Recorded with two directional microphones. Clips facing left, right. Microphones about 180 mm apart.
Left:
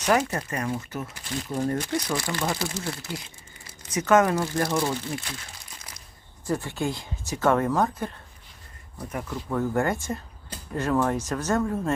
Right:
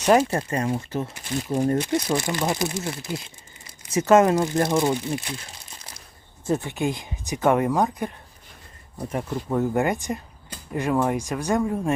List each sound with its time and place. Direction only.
0.0 s speech: 30° right (ahead or behind)
6.4 s speech: 20° right (ahead or behind)
9.0 s speech: 25° right (ahead or behind)